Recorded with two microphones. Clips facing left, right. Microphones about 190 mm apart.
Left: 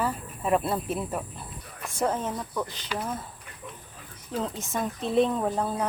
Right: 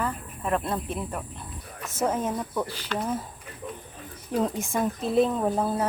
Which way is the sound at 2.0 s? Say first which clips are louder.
Right 1 dB; 10° right (ahead or behind).